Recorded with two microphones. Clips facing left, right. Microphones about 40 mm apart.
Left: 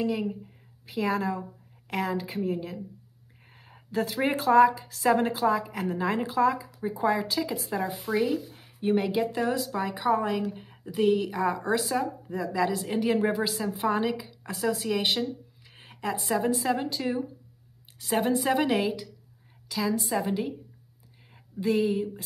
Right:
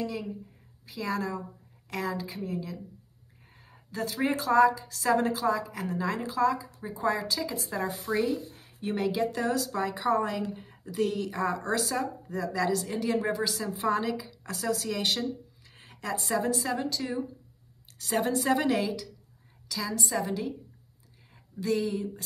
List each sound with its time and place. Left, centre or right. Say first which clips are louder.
0.0 s a woman's voice: left 5 dB; left
8.6 s speech: left 4 dB; left